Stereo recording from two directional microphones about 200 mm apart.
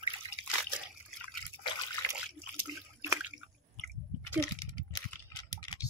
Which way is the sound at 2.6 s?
10° right (ahead or behind).